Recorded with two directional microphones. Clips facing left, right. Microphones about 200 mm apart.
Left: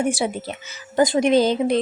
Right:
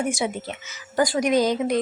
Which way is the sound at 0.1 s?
35° left (ahead or behind).